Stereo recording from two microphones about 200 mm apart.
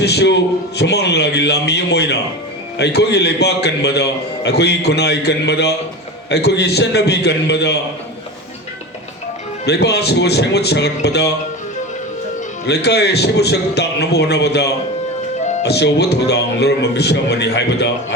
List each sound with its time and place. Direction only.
0.0 s a man's voice: 55° left (ahead or behind)
9.6 s a man's voice: 55° left (ahead or behind)
12.6 s a man's voice: 55° left (ahead or behind)